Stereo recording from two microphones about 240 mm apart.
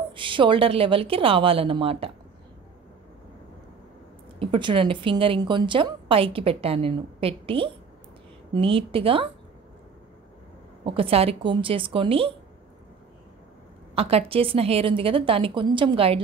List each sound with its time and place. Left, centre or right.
0.1 s a woman's voice: right
4.4 s a woman's voice: right
10.8 s a woman's voice: right
13.9 s a woman's voice: right